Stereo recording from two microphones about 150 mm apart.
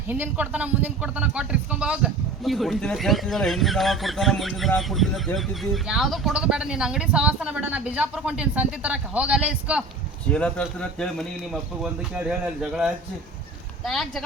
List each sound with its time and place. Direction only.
0.1 s a man's voice: 10° right (ahead or behind)
10.2 s a man's voice: 5° left (ahead or behind)